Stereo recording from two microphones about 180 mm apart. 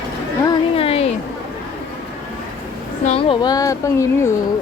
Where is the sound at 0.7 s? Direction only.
30° left (ahead or behind).